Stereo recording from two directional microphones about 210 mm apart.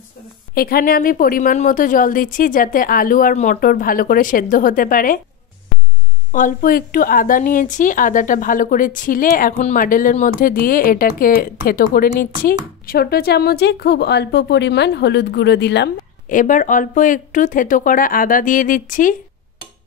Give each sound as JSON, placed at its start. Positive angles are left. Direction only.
{"t": 0.6, "sound": "a woman's voice", "side_deg": 45}
{"t": 6.3, "sound": "a woman's voice", "side_deg": 40}
{"t": 16.3, "sound": "a woman's voice", "side_deg": 40}